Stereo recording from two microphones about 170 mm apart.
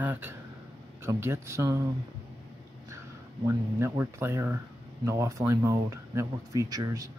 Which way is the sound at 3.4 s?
15° right (ahead or behind).